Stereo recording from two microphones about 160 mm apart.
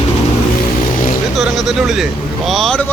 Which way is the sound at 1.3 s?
Centre (ahead or behind).